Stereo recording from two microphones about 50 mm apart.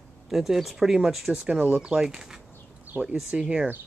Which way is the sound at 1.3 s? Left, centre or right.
Right.